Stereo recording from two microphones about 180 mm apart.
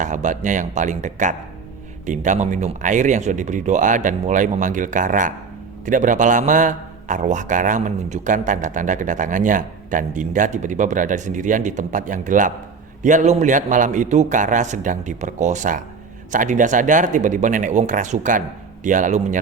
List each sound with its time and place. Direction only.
0.0 s a man's voice: 45° right (ahead or behind)